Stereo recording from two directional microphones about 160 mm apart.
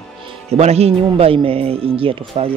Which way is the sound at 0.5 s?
40° right (ahead or behind).